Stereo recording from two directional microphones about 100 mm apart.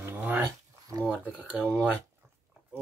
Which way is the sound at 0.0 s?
20° right (ahead or behind).